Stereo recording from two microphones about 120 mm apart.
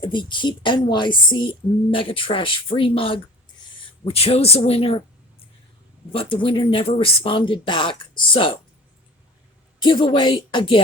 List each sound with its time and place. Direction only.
0.0 s a woman's voice: 40° left (ahead or behind)
6.1 s a woman's voice: 50° left (ahead or behind)
9.8 s speech: 40° left (ahead or behind)